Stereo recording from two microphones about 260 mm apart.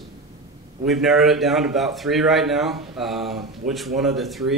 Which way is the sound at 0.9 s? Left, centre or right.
Centre.